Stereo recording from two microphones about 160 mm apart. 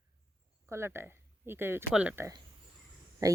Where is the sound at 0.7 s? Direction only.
15° right (ahead or behind).